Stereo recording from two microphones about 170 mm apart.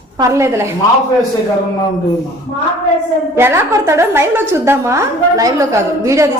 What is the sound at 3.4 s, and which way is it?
A woman's voice, 15° right (ahead or behind).